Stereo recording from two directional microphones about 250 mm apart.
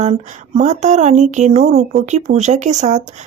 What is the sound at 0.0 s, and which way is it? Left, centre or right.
Speech, right.